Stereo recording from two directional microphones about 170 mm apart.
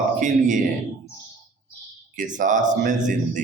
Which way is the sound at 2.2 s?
50° right (ahead or behind).